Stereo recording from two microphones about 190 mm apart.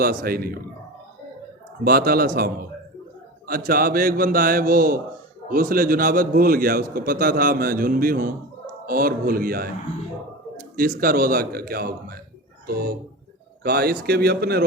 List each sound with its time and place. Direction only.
0.0 s a man's voice: 50° right (ahead or behind)
1.8 s a man's voice: 50° right (ahead or behind)
10.8 s a man's voice: 50° right (ahead or behind)